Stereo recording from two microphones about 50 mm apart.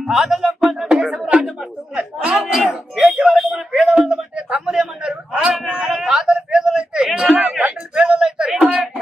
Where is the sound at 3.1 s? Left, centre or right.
Centre.